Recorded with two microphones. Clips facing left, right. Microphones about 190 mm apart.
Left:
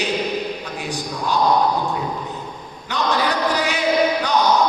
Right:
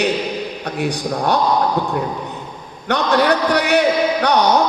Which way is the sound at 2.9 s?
65° right (ahead or behind).